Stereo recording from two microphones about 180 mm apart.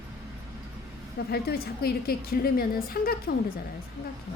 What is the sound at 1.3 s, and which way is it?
A woman's voice, 60° left (ahead or behind).